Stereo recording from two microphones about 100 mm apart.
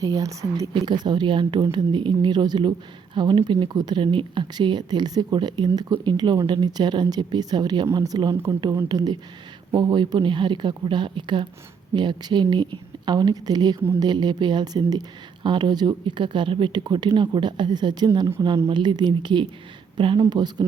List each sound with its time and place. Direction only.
0.0 s speech: 35° right (ahead or behind)
0.7 s speech: 50° right (ahead or behind)